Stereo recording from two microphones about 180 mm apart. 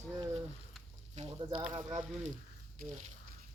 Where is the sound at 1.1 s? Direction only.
35° right (ahead or behind).